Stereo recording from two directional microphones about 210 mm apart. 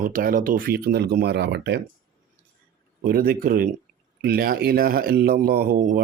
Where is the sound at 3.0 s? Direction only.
45° right (ahead or behind).